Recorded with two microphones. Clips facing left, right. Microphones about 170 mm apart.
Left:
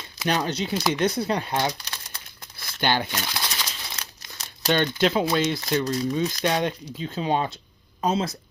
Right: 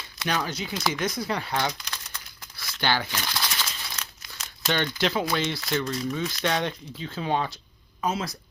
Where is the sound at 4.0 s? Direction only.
35° left (ahead or behind).